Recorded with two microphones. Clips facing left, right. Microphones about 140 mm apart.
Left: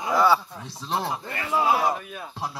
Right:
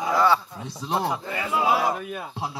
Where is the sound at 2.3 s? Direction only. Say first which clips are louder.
Right 1 dB; 15° right (ahead or behind).